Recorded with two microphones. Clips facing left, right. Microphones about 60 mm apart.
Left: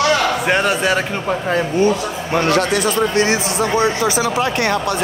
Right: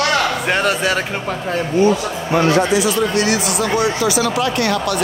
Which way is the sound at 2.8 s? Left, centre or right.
Left.